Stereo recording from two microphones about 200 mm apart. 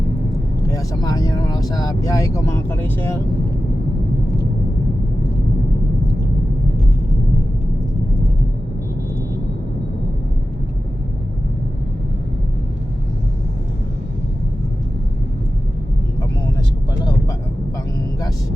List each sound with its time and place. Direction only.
0.7 s speech: 15° left (ahead or behind)